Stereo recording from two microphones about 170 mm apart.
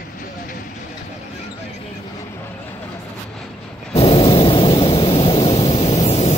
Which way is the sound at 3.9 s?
35° left (ahead or behind).